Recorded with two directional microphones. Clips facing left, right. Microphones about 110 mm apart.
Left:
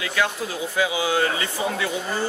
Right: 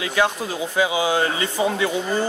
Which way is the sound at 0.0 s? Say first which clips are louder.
Right 4 dB; 25° right (ahead or behind).